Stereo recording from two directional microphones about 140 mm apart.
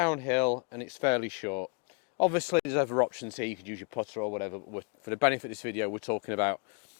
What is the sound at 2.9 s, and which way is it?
Speech, 30° left (ahead or behind).